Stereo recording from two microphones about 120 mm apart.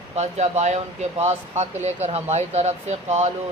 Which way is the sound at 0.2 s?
65° right (ahead or behind).